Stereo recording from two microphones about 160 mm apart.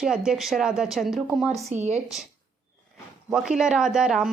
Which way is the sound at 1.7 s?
45° right (ahead or behind).